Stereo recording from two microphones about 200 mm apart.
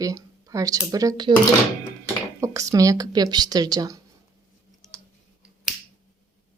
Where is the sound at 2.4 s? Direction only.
15° right (ahead or behind).